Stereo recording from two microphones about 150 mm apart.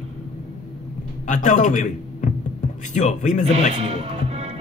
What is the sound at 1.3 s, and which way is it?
Speech, 55° left (ahead or behind).